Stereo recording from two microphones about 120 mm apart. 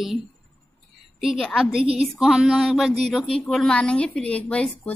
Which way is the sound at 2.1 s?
Centre (ahead or behind).